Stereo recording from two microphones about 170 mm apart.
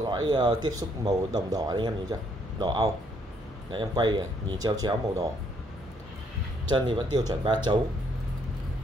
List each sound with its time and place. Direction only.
0.0 s speech: 25° right (ahead or behind)
6.7 s speech: 25° right (ahead or behind)